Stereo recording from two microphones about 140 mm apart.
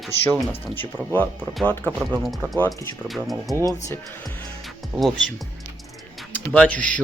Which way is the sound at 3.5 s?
25° right (ahead or behind).